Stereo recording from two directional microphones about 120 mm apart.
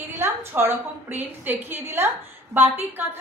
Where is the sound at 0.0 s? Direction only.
20° right (ahead or behind).